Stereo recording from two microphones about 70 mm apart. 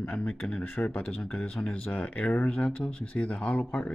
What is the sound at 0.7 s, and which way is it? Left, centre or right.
Speech, left.